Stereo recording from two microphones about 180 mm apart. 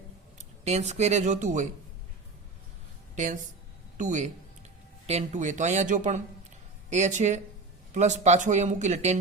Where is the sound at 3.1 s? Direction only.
40° right (ahead or behind).